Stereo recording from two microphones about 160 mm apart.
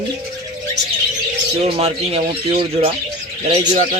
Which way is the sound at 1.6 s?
40° right (ahead or behind).